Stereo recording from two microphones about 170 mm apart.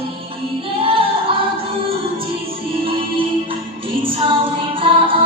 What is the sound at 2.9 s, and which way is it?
Music, 30° right (ahead or behind).